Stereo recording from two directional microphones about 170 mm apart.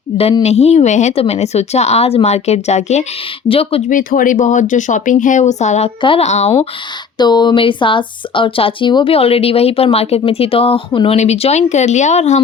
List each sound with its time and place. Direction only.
0.4 s speech: 40° left (ahead or behind)
3.9 s speech: 55° left (ahead or behind)
7.2 s speech: 25° left (ahead or behind); by 12.4 s 40° left (ahead or behind)